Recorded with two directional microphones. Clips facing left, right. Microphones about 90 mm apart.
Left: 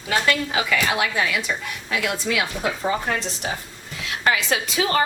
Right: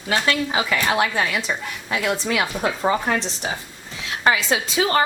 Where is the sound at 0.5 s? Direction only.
30° right (ahead or behind).